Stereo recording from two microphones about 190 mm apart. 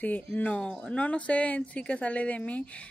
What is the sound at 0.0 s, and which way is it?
Speech, 10° left (ahead or behind).